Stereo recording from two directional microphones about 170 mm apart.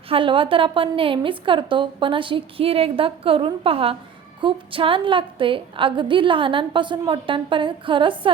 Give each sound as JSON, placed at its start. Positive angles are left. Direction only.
{"t": 0.1, "sound": "a woman's voice", "side_deg": -30}